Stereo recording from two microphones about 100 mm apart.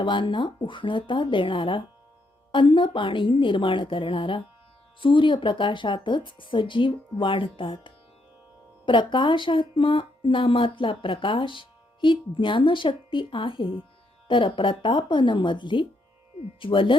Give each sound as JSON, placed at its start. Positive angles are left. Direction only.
{"t": 0.0, "sound": "speech", "side_deg": 55}